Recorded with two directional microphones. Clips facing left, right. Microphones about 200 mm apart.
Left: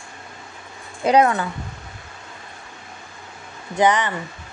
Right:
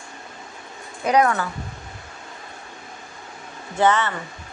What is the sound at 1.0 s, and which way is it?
Speech, 25° left (ahead or behind).